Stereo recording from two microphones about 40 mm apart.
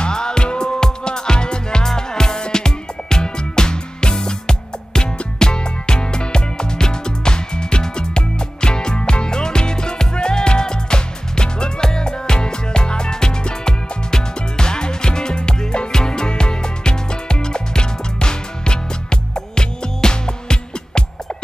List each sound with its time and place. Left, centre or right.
0.0 s music: centre